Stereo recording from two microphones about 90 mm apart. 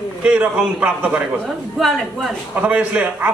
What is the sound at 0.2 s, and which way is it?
A man's voice, 15° right (ahead or behind).